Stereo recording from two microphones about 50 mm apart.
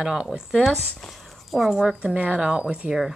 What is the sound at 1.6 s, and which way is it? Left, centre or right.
Speech, centre.